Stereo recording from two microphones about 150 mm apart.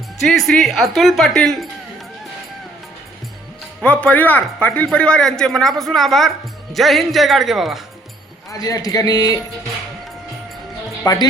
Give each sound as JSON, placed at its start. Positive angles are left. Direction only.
{"t": 0.2, "sound": "speech", "side_deg": 0}
{"t": 4.0, "sound": "speech", "side_deg": 10}
{"t": 8.4, "sound": "a man's voice", "side_deg": 20}
{"t": 11.0, "sound": "speech", "side_deg": 25}